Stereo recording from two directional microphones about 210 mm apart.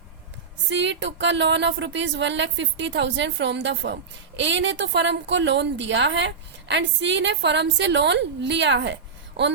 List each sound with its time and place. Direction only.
0.7 s a woman's voice: 55° right (ahead or behind)